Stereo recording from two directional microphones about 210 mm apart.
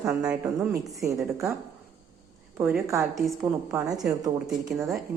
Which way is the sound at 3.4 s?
15° right (ahead or behind).